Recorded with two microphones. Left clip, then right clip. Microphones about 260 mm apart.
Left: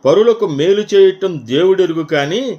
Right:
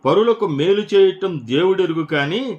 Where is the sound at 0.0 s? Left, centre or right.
Centre.